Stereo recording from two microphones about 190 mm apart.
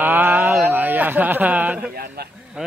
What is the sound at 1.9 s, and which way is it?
Speech, 50° right (ahead or behind).